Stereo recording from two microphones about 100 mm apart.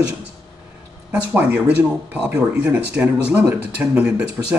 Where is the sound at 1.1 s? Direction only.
15° right (ahead or behind).